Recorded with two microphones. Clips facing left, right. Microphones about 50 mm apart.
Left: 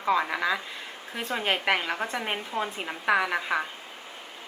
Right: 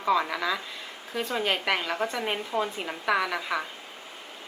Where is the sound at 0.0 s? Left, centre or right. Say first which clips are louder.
Even; centre.